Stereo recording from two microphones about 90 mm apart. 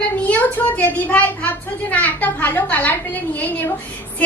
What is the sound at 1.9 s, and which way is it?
A child's voice, 20° left (ahead or behind).